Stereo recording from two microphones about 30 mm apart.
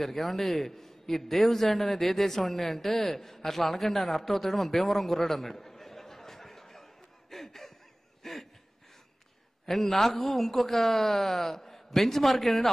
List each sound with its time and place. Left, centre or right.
0.0 s a man's voice: centre
8.2 s a sound: centre
9.7 s speech: centre